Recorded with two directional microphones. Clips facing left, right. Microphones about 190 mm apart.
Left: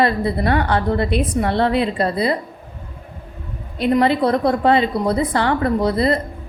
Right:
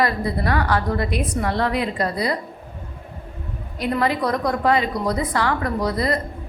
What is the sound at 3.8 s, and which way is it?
A woman's voice, 25° left (ahead or behind).